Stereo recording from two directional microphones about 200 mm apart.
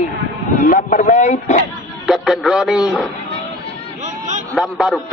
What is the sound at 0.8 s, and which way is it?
Speech, 35° left (ahead or behind).